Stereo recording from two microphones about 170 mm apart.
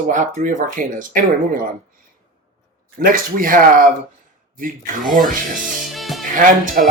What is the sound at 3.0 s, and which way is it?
Speech, 55° right (ahead or behind).